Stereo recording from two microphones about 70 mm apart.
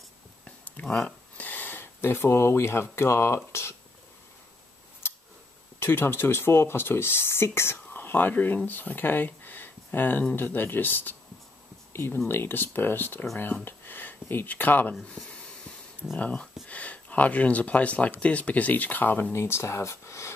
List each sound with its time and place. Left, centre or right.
0.5 s a sound: centre; by 3.3 s left
5.0 s scissors: left
5.8 s speech: left
15.0 s speech: centre
15.2 s snort: centre
16.2 s speech: centre
19.3 s speech: left